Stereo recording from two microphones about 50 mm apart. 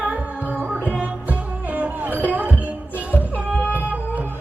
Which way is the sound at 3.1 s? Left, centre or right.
Left.